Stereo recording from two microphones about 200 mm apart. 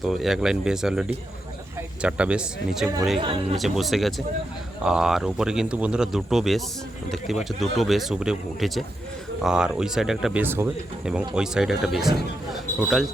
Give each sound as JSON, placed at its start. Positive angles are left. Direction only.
{"t": 0.0, "sound": "speech", "side_deg": 0}
{"t": 3.2, "sound": "speech", "side_deg": -25}
{"t": 3.6, "sound": "speech", "side_deg": 0}